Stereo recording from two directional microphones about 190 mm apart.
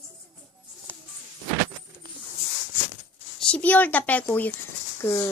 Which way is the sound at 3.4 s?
5° left (ahead or behind).